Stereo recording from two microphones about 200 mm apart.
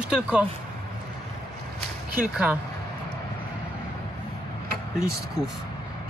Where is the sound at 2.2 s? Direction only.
5° right (ahead or behind).